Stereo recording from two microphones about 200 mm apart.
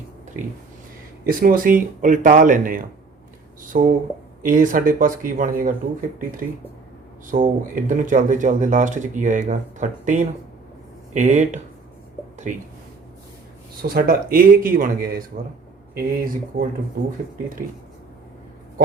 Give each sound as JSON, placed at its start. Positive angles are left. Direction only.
{"t": 0.4, "sound": "speech", "side_deg": -40}
{"t": 13.8, "sound": "speech", "side_deg": -50}